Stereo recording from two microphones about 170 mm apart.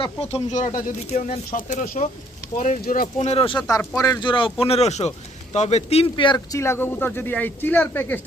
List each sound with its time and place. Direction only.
0.0 s speech: 35° left (ahead or behind)
1.5 s speech: 55° left (ahead or behind)
3.2 s speech: 35° left (ahead or behind)
3.7 s speech: 20° left (ahead or behind)